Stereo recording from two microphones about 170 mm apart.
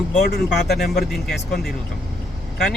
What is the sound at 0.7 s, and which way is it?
Speech, 65° left (ahead or behind).